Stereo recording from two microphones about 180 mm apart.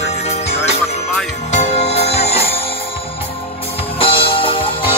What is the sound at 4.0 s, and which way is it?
Music, 30° left (ahead or behind).